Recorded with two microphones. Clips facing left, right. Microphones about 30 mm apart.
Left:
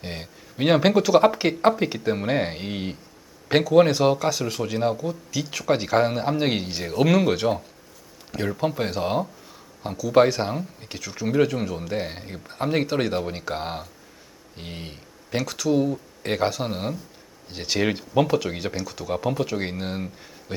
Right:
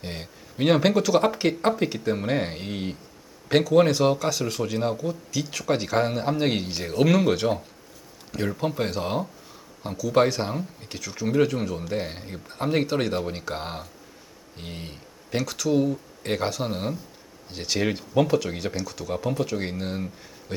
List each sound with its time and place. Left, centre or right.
0.0 s speech: centre